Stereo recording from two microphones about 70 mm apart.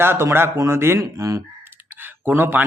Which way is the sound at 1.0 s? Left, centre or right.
Right.